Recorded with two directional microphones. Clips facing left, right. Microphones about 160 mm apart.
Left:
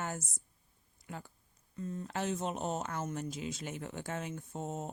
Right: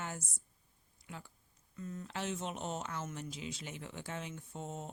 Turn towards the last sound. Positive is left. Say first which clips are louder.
# left 4 dB
turn(degrees=40)  # may be behind; listen again after turning